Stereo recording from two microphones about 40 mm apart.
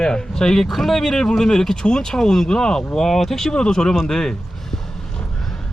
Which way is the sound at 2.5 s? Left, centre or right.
Centre.